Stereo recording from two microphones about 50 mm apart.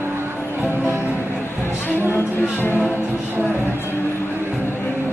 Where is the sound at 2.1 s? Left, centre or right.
Left.